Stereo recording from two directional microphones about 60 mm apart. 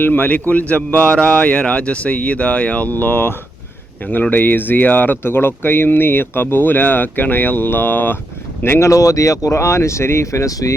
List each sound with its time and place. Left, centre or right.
0.0 s speech: left
8.8 s speech: left